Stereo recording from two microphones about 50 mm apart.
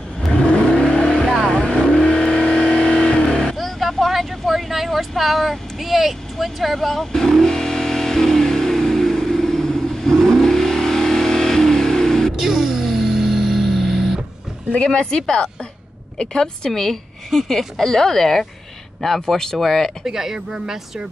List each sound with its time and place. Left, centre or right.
0.5 s vehicle: centre
3.5 s vehicle: centre
12.4 s music: centre
15.0 s a woman's voice: centre
20.1 s speech: centre